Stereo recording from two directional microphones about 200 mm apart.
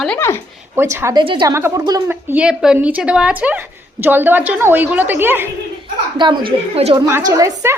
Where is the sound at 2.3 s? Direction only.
5° right (ahead or behind).